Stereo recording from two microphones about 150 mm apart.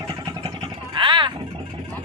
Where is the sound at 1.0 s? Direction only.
30° right (ahead or behind).